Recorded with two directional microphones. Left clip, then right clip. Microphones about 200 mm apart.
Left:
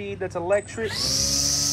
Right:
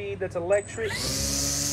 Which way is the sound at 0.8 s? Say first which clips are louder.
Left 4 dB; centre (ahead or behind).